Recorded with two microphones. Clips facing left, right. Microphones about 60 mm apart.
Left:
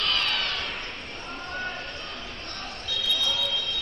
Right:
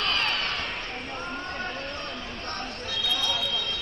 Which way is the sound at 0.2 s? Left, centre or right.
Right.